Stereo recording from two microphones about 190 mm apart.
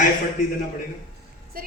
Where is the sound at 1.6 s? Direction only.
50° right (ahead or behind).